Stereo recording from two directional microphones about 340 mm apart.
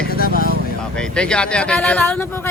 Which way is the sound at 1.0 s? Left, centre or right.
Centre.